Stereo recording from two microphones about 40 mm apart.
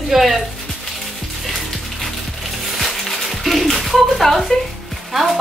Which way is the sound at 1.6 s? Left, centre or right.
Centre.